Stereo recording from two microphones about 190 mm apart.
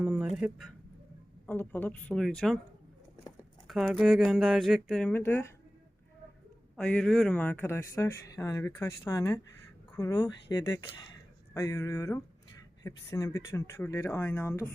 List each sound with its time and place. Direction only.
0.0 s a sound: 5° right (ahead or behind)
1.5 s speech: 10° left (ahead or behind)
3.7 s speech: centre (ahead or behind)
6.7 s speech: 5° left (ahead or behind)